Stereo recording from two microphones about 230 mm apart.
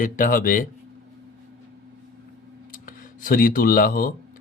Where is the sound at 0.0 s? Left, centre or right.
Left.